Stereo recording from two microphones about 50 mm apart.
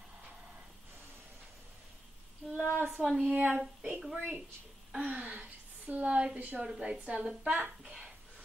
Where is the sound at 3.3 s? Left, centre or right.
Right.